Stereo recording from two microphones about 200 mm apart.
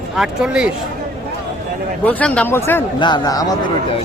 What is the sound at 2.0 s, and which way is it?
Speech, 5° left (ahead or behind).